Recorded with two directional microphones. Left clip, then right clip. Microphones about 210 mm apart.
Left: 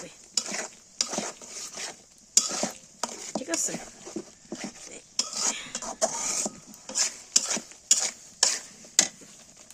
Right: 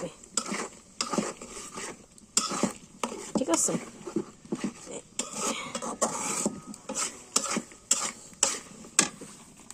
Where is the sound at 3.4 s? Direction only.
10° left (ahead or behind).